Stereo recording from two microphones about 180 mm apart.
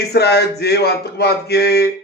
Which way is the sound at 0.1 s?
65° left (ahead or behind).